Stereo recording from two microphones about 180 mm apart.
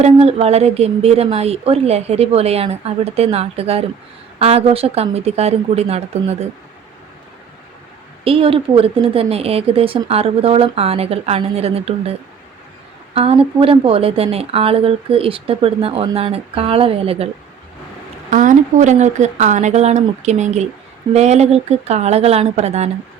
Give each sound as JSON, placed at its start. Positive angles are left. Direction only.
{"t": 0.0, "sound": "a woman's voice", "side_deg": -35}
{"t": 8.2, "sound": "a woman's voice", "side_deg": -30}
{"t": 13.1, "sound": "a woman's voice", "side_deg": -35}
{"t": 18.3, "sound": "a woman's voice", "side_deg": -45}